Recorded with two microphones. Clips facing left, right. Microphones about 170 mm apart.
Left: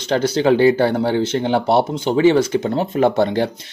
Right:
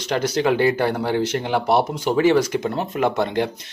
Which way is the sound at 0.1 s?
30° left (ahead or behind).